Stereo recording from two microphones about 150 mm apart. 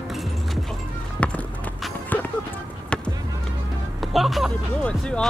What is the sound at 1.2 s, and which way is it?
Run, 10° left (ahead or behind).